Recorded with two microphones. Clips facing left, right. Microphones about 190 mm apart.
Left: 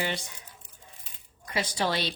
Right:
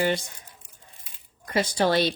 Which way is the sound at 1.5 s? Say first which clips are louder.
Right 6 dB; 45° right (ahead or behind).